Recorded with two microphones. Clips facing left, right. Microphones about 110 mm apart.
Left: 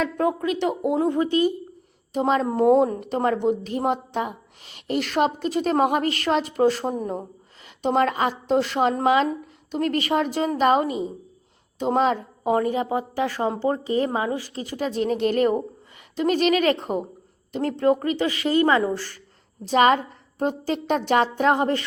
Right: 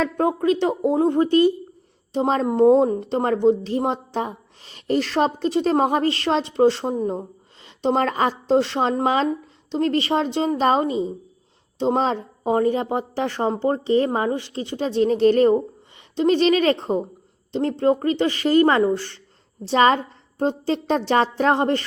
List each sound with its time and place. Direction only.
0.0 s a woman's voice: 35° right (ahead or behind)